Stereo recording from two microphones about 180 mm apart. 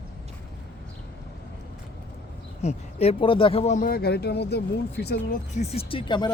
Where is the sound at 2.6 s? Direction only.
35° left (ahead or behind).